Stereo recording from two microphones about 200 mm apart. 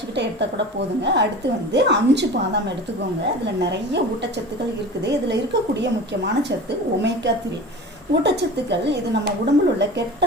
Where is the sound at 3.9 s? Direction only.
60° right (ahead or behind).